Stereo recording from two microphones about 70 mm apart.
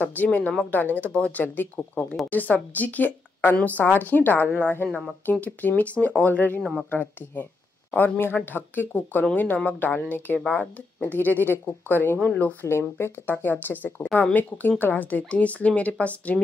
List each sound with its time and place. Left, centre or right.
0.0 s speech: left
6.6 s speech: centre
6.9 s speech: left
12.6 s speech: left; by 16.3 s centre